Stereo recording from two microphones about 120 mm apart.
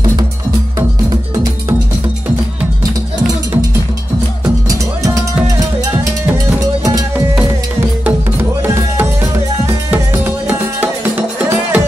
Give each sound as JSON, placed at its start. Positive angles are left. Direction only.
{"t": 0.7, "sound": "music", "side_deg": -30}
{"t": 4.6, "sound": "music", "side_deg": -25}
{"t": 8.6, "sound": "music", "side_deg": -20}